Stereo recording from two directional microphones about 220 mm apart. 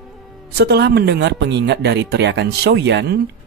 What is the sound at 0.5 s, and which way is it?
Speech, 50° right (ahead or behind).